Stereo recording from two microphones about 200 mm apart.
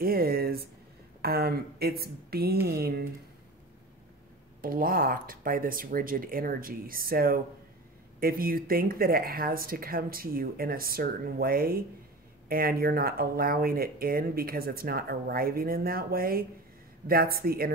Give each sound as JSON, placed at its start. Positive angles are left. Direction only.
{"t": 0.0, "sound": "speech", "side_deg": -50}
{"t": 4.6, "sound": "speech", "side_deg": -45}